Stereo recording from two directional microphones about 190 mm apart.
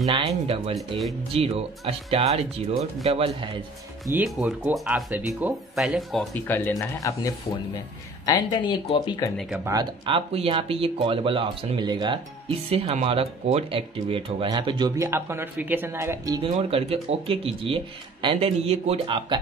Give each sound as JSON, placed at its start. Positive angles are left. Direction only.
{"t": 0.0, "sound": "speech", "side_deg": -25}
{"t": 1.3, "sound": "speech", "side_deg": -30}
{"t": 4.1, "sound": "speech", "side_deg": -5}
{"t": 6.3, "sound": "speech", "side_deg": 10}
{"t": 9.7, "sound": "speech", "side_deg": -25}